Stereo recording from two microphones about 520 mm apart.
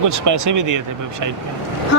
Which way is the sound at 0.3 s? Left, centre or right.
Right.